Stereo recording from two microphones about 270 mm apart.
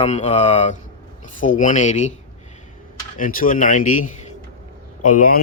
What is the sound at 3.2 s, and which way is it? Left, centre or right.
Speech, left.